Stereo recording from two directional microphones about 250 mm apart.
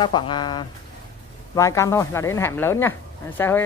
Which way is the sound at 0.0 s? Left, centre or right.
Centre.